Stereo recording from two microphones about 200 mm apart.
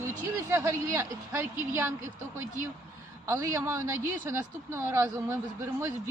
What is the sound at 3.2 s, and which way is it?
Speech, 15° right (ahead or behind).